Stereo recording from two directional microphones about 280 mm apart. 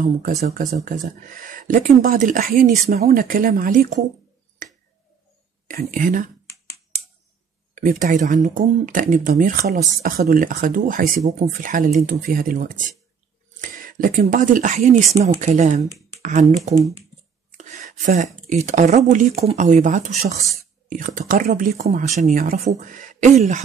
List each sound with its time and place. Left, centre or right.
0.4 s speech: right
4.6 s finger snapping: right
5.7 s speech: right
7.7 s speech: right